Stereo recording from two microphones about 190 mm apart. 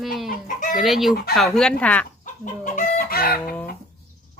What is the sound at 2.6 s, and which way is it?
Chicken, 45° left (ahead or behind).